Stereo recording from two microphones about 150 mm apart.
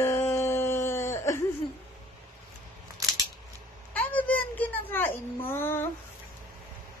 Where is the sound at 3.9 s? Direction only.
10° left (ahead or behind).